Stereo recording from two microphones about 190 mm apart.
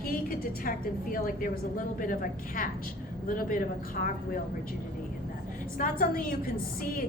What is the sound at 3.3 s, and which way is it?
A woman's voice, 50° left (ahead or behind).